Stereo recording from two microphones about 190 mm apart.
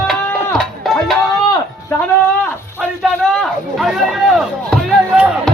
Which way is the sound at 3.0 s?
Centre (ahead or behind).